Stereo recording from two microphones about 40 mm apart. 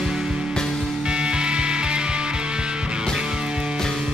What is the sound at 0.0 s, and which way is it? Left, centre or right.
Music, centre.